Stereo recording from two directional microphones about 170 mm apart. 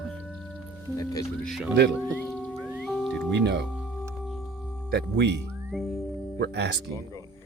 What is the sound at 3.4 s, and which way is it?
Speech, 90° right.